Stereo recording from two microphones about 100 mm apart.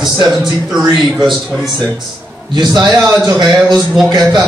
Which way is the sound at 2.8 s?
45° right (ahead or behind).